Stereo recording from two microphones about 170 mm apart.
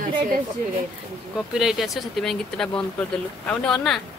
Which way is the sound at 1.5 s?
5° right (ahead or behind).